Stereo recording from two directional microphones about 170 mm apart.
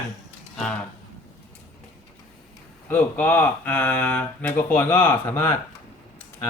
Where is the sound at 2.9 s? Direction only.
10° left (ahead or behind).